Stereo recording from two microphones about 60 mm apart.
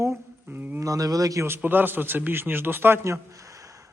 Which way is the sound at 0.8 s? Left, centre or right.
Right.